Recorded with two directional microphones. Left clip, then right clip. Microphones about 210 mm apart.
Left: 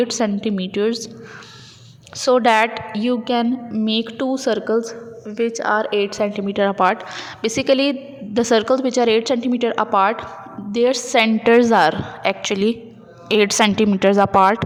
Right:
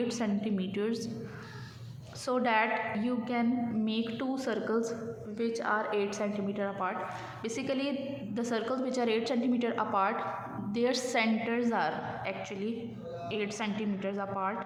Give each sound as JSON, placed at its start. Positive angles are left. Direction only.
{"t": 0.1, "sound": "a woman's voice", "side_deg": 40}
{"t": 2.1, "sound": "a woman's voice", "side_deg": 40}